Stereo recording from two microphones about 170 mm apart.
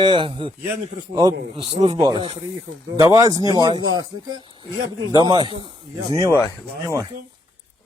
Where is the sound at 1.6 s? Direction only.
35° right (ahead or behind).